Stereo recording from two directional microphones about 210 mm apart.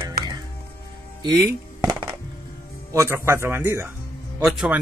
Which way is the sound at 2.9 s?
15° right (ahead or behind).